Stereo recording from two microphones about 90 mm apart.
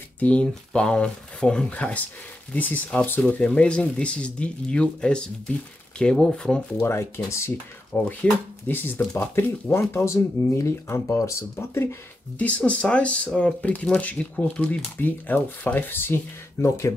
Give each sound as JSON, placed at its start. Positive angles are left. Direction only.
{"t": 0.2, "sound": "speech", "side_deg": 15}
{"t": 6.8, "sound": "speech", "side_deg": 30}
{"t": 7.9, "sound": "speech", "side_deg": 15}
{"t": 16.6, "sound": "speech", "side_deg": 35}